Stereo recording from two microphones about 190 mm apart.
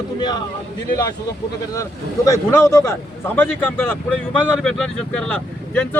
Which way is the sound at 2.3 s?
15° left (ahead or behind).